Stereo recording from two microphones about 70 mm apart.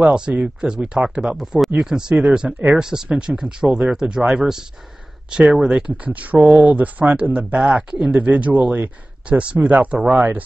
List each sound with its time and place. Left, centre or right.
0.1 s speech: centre
1.3 s speech: centre; by 10.4 s right